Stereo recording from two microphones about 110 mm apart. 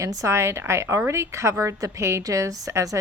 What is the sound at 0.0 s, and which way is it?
A woman's voice, 30° right (ahead or behind).